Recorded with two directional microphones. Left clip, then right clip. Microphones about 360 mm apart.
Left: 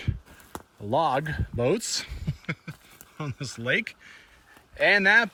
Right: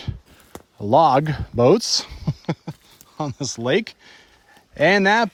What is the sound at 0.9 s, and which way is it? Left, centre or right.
Speech, centre.